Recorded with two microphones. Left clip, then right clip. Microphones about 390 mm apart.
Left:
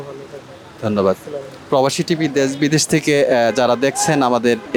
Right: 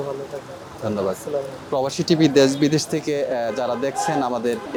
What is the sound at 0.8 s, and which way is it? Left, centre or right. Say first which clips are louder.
Speech: left 7 dB; centre.